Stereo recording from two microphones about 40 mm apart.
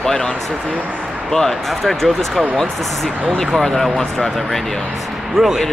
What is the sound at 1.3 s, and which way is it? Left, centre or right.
Speech, centre.